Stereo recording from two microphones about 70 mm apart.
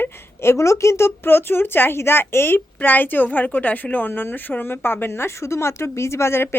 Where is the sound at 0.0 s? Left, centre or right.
Left.